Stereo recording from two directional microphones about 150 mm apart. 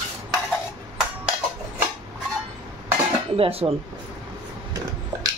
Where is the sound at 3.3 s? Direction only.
40° right (ahead or behind).